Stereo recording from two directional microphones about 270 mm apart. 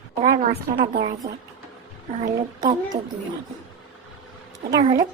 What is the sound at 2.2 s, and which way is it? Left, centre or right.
Speech, right.